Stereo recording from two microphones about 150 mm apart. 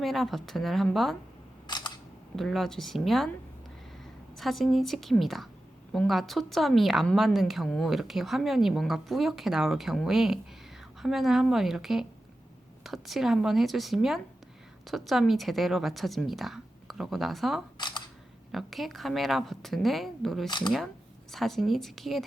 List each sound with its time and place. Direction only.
0.0 s speech: centre (ahead or behind)
1.6 s camera: 30° left (ahead or behind)
2.3 s speech: centre (ahead or behind)
4.4 s speech: centre (ahead or behind)
17.7 s camera: 30° left (ahead or behind)
18.5 s speech: centre (ahead or behind)
20.5 s speech: 30° left (ahead or behind)
21.3 s speech: centre (ahead or behind)